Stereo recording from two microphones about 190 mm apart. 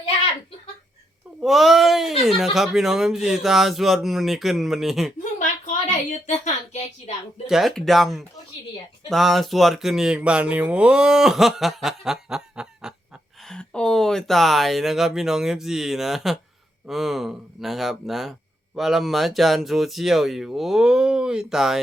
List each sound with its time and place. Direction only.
1.4 s speech: centre (ahead or behind)
5.4 s a sound: 40° left (ahead or behind)
7.4 s speech: centre (ahead or behind)